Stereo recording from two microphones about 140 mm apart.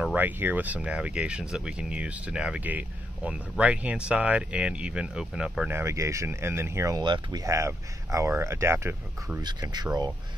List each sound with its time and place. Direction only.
0.0 s speech: 10° right (ahead or behind)
5.7 s speech: 20° right (ahead or behind)
7.0 s speech: 30° right (ahead or behind)
9.4 s speech: 30° right (ahead or behind)